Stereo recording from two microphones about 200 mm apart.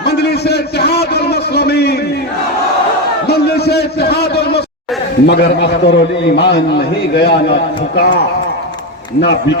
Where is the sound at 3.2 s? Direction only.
55° left (ahead or behind).